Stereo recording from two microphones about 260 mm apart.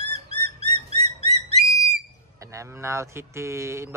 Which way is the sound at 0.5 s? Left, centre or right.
Right.